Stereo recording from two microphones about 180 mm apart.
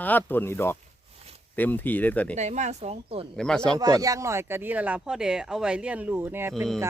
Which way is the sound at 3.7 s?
20° right (ahead or behind).